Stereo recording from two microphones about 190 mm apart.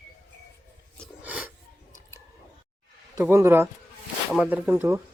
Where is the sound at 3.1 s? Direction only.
15° right (ahead or behind).